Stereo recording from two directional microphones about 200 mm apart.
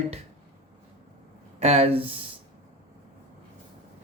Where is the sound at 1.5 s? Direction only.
30° right (ahead or behind).